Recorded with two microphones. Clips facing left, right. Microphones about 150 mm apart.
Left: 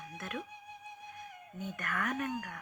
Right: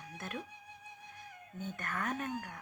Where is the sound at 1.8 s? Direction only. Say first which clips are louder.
Left 2 dB; 30° right (ahead or behind).